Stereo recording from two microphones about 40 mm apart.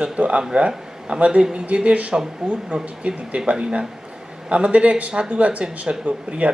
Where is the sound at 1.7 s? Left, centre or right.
Right.